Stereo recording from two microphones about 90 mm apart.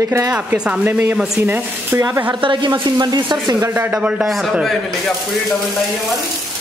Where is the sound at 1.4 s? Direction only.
25° right (ahead or behind).